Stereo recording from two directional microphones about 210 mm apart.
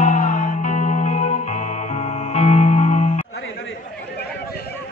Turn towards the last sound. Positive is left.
turn(degrees=35)  # may be behind; listen again after turning